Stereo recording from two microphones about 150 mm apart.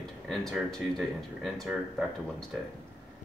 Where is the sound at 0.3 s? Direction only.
Centre (ahead or behind).